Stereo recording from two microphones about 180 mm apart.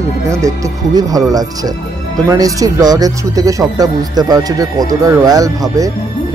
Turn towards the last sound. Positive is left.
turn(degrees=-20)  # may be behind; listen again after turning